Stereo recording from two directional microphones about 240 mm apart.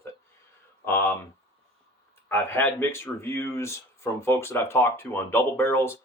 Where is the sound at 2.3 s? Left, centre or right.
Centre.